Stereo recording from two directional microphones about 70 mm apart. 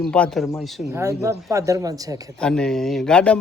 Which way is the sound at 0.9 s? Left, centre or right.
Right.